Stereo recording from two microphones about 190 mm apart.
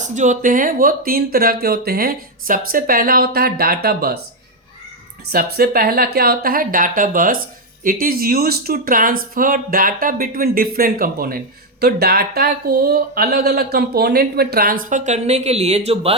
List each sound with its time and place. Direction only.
0.0 s speech: 40° right (ahead or behind); by 4.2 s 55° right (ahead or behind)
5.3 s speech: 55° right (ahead or behind); by 16.1 s 35° right (ahead or behind)